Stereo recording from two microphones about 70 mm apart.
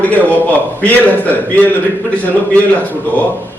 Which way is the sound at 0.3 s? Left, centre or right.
Left.